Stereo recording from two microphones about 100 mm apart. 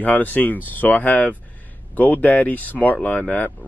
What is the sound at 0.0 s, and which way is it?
Speech, 15° left (ahead or behind).